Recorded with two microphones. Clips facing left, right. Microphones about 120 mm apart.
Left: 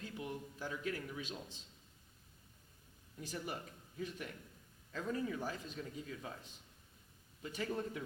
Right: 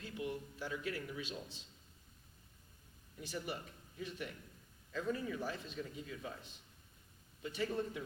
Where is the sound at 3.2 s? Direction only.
40° left (ahead or behind).